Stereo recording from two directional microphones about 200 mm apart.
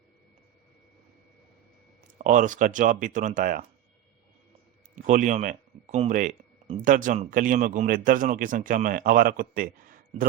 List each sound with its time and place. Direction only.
2.0 s speech: 40° right (ahead or behind)
5.0 s speech: 40° right (ahead or behind)